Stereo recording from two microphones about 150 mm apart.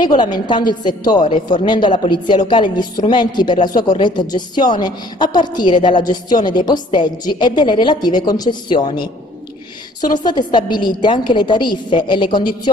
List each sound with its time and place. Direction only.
0.0 s a woman's voice: 30° left (ahead or behind)
10.2 s a woman's voice: 30° left (ahead or behind)